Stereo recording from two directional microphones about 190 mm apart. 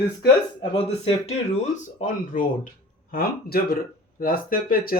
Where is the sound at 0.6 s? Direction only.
30° left (ahead or behind).